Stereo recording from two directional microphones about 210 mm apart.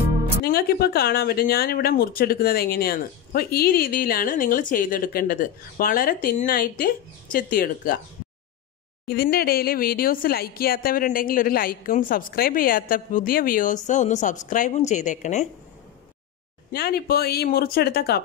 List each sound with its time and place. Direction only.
0.4 s speech: 45° left (ahead or behind)
9.0 s a woman's voice: 45° left (ahead or behind)
16.7 s speech: 50° left (ahead or behind)